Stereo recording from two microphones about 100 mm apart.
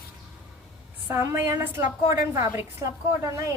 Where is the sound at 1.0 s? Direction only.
25° right (ahead or behind).